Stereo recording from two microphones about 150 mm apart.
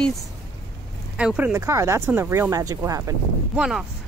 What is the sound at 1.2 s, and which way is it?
Speech, 10° right (ahead or behind).